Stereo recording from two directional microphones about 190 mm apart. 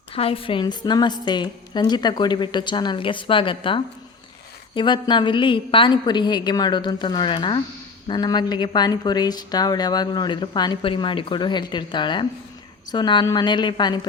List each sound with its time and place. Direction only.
0.1 s a woman's voice: 30° left (ahead or behind)